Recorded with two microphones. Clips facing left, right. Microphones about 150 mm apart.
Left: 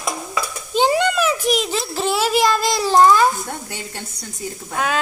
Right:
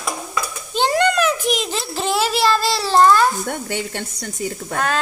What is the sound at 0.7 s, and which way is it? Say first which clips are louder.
A child's voice: even; 5° left (ahead or behind).